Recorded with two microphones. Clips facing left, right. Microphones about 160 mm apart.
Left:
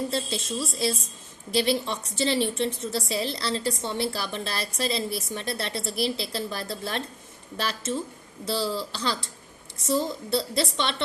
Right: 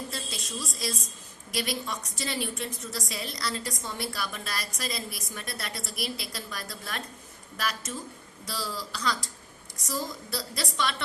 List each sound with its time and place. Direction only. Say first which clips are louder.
0.1 s a woman's voice: left 8 dB; 30° left (ahead or behind)